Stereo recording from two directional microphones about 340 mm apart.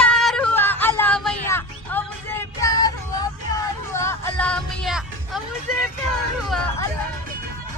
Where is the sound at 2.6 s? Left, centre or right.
Centre.